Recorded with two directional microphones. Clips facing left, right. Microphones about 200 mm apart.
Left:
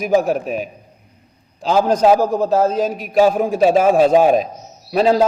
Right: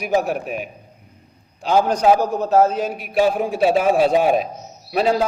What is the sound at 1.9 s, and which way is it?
Speech, 90° left.